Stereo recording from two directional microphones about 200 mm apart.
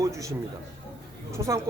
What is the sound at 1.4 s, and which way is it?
Speech, 15° right (ahead or behind).